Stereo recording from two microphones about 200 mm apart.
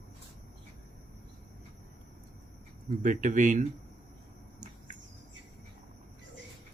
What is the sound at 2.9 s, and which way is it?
Speech, 40° right (ahead or behind).